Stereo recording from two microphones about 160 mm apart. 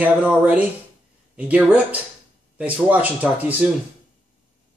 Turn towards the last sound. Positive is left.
turn(degrees=-10)  # may be behind; listen again after turning